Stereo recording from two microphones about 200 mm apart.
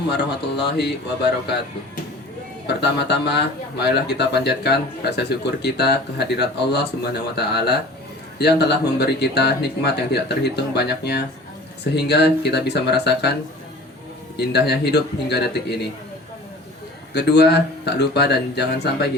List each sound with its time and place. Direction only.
0.1 s speech: 55° left (ahead or behind)
2.6 s speech: 55° left (ahead or behind)
14.3 s speech: 55° left (ahead or behind)
17.2 s speech: 55° left (ahead or behind)